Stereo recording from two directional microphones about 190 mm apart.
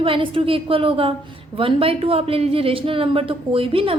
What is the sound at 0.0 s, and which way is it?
A woman's voice, 30° right (ahead or behind).